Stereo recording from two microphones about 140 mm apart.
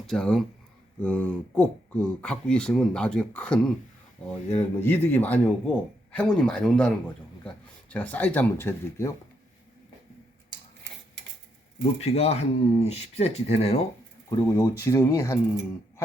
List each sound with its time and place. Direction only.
0.1 s speech: 5° left (ahead or behind)
4.8 s speech: 15° left (ahead or behind)
11.8 s speech: 45° left (ahead or behind)
14.3 s speech: 25° left (ahead or behind)